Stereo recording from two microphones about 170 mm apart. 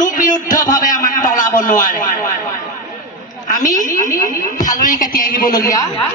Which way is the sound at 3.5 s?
50° left (ahead or behind).